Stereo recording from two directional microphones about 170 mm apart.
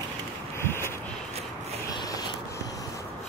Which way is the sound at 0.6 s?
15° left (ahead or behind).